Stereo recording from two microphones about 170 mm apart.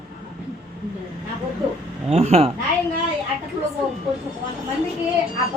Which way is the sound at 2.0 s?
40° right (ahead or behind).